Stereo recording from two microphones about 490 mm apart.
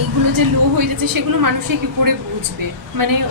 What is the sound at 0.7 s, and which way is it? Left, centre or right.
A woman's voice, right.